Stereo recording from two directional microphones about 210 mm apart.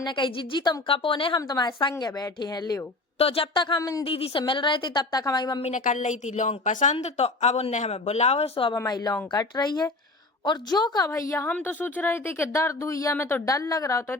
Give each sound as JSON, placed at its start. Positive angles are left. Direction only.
{"t": 0.0, "sound": "a woman's voice", "side_deg": 20}
{"t": 5.7, "sound": "a woman's voice", "side_deg": 35}
{"t": 8.7, "sound": "a woman's voice", "side_deg": 15}